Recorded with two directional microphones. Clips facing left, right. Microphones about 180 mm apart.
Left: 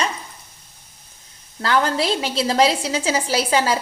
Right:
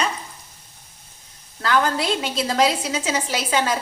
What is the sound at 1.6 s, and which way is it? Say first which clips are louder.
A woman's voice: left 1 dB; 30° left (ahead or behind).